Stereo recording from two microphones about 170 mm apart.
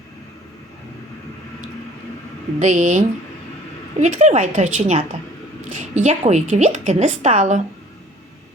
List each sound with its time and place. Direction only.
2.6 s a woman's voice: 45° right (ahead or behind)
4.0 s a woman's voice: 45° right (ahead or behind)